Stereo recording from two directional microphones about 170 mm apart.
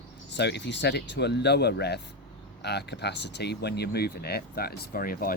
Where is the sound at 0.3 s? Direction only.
90° left.